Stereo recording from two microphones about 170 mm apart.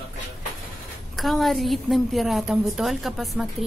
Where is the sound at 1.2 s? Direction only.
Centre (ahead or behind).